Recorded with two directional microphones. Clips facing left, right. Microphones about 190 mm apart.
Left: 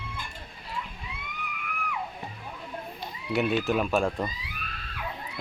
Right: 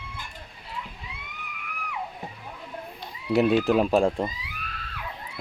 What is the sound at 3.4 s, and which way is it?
Speech, 35° right (ahead or behind).